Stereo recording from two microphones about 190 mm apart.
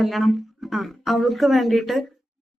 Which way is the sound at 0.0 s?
Centre (ahead or behind).